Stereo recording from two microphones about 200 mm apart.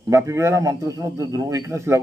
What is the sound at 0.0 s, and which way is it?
Speech, 15° right (ahead or behind).